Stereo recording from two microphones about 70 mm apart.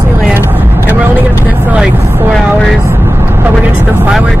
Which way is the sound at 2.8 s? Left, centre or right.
Right.